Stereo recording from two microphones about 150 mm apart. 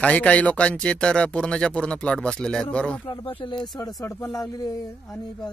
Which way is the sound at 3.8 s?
20° left (ahead or behind).